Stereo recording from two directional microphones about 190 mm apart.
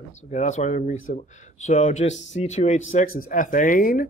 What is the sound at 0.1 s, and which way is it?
Speech, 40° left (ahead or behind).